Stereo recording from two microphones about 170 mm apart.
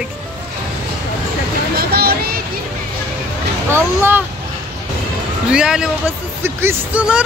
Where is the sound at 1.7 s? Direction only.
65° right (ahead or behind).